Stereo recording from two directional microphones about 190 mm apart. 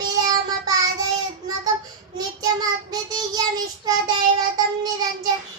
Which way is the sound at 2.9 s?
20° right (ahead or behind).